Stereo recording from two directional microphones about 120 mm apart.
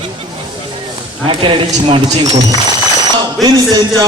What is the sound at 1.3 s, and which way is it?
Speech, 45° right (ahead or behind).